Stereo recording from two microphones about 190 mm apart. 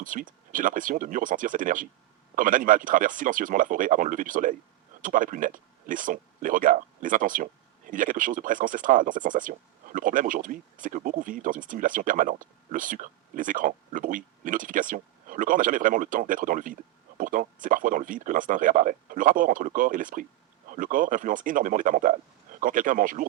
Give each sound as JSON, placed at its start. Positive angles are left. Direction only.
{"t": 0.0, "sound": "speech", "side_deg": -45}